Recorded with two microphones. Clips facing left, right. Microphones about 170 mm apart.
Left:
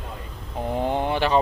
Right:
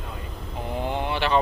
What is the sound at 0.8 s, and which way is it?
Speech, 45° left (ahead or behind).